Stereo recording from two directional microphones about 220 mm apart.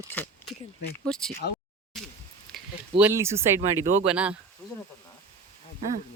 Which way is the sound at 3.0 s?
10° right (ahead or behind).